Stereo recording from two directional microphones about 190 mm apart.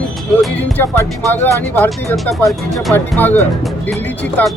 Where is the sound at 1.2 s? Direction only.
10° left (ahead or behind).